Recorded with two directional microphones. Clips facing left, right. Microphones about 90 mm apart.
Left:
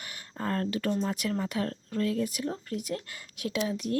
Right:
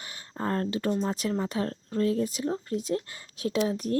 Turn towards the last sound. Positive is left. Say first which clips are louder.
# right 3 dB
turn(degrees=-35)  # may be behind; listen again after turning